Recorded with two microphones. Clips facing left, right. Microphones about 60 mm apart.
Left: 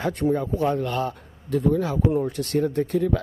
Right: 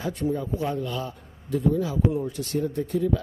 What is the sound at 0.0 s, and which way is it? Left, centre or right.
A man's voice, left.